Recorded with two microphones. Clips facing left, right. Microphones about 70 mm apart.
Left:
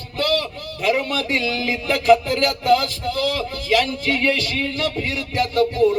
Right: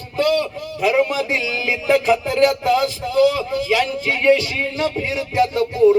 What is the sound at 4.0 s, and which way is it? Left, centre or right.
A man's voice, centre.